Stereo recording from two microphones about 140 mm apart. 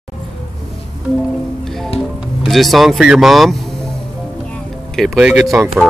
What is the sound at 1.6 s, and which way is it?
Music, 5° left (ahead or behind).